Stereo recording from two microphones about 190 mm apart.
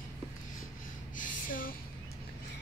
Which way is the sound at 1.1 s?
45° left (ahead or behind).